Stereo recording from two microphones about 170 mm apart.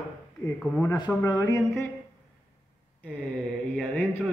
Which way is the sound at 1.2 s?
20° left (ahead or behind).